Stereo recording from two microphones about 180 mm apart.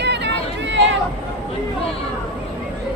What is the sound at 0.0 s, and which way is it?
Chatter, 70° right (ahead or behind).